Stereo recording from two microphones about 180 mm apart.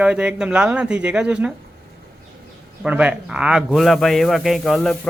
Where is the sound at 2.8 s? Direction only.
5° right (ahead or behind).